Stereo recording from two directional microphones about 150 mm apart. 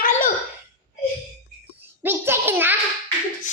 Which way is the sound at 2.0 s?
15° right (ahead or behind).